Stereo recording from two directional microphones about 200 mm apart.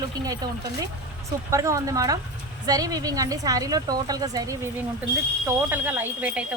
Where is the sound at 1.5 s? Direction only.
15° right (ahead or behind).